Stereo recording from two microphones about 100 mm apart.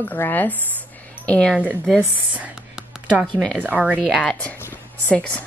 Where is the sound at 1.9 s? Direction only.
10° right (ahead or behind).